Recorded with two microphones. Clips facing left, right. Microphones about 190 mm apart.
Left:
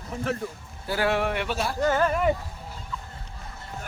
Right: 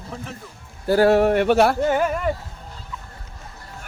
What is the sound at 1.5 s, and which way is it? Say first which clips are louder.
Speech: right 12 dB; 70° right (ahead or behind).